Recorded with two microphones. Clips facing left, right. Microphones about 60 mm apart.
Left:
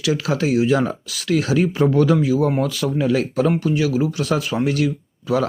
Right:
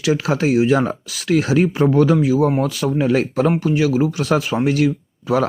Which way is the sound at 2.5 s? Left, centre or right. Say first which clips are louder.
Right 2 dB; centre.